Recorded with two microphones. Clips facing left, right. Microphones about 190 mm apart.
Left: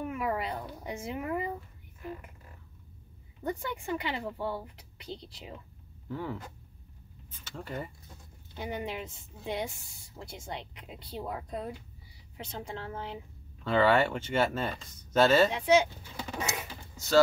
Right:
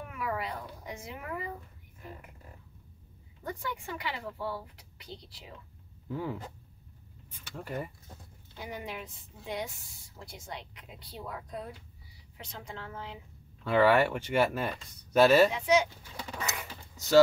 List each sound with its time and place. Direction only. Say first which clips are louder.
0.1 s a sound: left 3 dB; 25° left (ahead or behind)
3.4 s speech: left 4 dB; 25° left (ahead or behind)
6.0 s speech: right 1 dB; 10° right (ahead or behind)
8.5 s a woman's voice: left 4 dB; 25° left (ahead or behind)
13.7 s speech: right 1 dB; 10° right (ahead or behind)
15.5 s speech: left 2 dB; 30° left (ahead or behind)